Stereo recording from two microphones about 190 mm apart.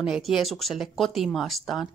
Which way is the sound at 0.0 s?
Centre (ahead or behind).